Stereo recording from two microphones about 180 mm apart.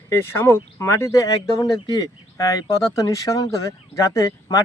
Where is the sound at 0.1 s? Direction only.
15° left (ahead or behind).